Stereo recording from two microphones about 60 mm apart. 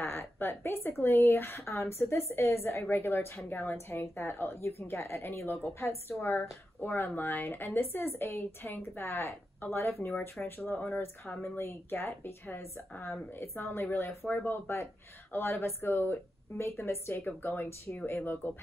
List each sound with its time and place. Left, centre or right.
0.0 s speech: left
10.6 s speech: left
11.4 s speech: left
16.6 s speech: left
17.3 s speech: left